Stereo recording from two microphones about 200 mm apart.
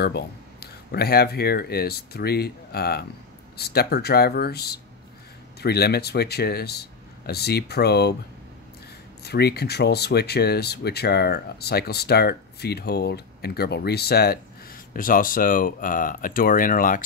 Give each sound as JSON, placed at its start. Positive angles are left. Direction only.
{"t": 0.0, "sound": "speech", "side_deg": 55}
{"t": 9.2, "sound": "speech", "side_deg": 55}